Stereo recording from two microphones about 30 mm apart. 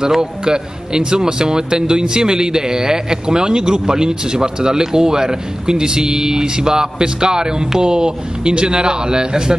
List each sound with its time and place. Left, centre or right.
0.1 s speech: right